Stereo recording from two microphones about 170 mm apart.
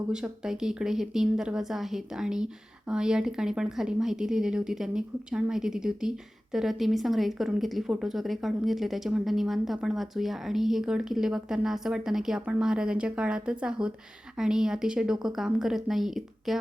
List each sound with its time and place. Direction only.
0.1 s speech: 5° right (ahead or behind)